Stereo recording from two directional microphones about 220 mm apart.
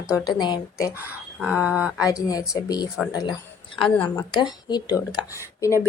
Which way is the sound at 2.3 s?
15° left (ahead or behind).